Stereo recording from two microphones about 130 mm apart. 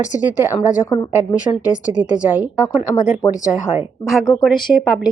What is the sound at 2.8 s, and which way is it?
Speech, 80° left.